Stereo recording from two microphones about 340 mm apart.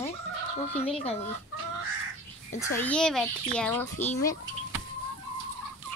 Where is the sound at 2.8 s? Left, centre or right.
Centre.